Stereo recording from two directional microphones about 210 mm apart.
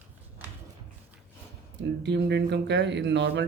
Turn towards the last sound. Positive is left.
turn(degrees=-55)  # may be behind; listen again after turning